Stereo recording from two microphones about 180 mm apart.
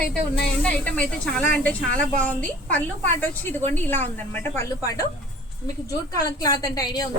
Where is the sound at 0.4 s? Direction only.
5° left (ahead or behind).